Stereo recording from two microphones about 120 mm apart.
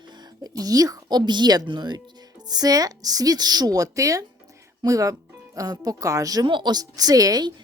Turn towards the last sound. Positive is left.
turn(degrees=-35)  # may be behind; listen again after turning